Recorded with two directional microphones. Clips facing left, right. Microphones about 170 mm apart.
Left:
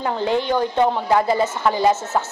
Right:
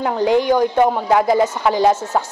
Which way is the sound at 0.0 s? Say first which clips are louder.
Right 5 dB; 15° right (ahead or behind).